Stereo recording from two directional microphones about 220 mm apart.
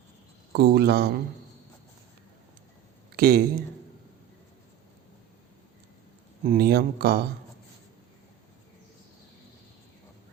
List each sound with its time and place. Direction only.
0.5 s speech: 50° right (ahead or behind)
3.2 s speech: 45° right (ahead or behind)
6.4 s speech: 40° right (ahead or behind)